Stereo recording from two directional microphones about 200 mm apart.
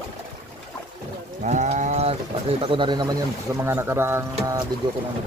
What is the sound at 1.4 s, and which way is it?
Speech, 35° right (ahead or behind).